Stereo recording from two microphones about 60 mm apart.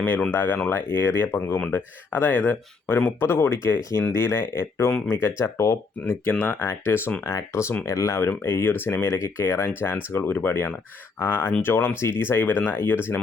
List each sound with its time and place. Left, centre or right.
0.0 s speech: left
6.4 s speech: left
7.3 s speech: left
8.3 s speech: left
10.3 s speech: left
12.4 s speech: left